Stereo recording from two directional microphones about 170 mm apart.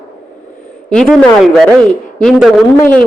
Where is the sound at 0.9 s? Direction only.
5° left (ahead or behind).